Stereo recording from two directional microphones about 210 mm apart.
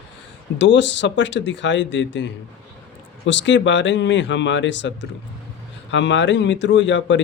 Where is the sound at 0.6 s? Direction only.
60° left (ahead or behind).